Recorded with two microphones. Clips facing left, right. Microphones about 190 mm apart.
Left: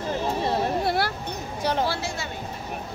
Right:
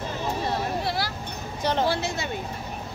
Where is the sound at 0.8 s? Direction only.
55° left (ahead or behind).